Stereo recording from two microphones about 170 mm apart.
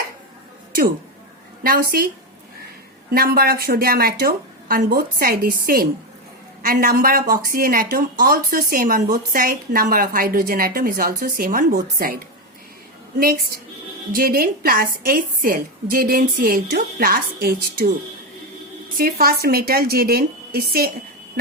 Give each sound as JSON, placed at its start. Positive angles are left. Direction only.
{"t": 1.6, "sound": "a woman's voice", "side_deg": -60}
{"t": 3.1, "sound": "a woman's voice", "side_deg": -60}
{"t": 18.9, "sound": "a woman's voice", "side_deg": -60}